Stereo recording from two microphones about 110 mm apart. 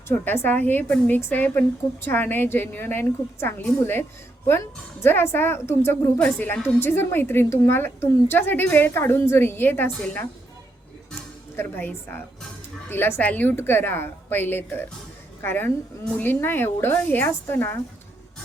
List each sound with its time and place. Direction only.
0.1 s a woman's voice: 20° left (ahead or behind)
5.0 s a woman's voice: 20° left (ahead or behind)
6.1 s a woman's voice: 10° left (ahead or behind)
11.5 s a woman's voice: 20° left (ahead or behind)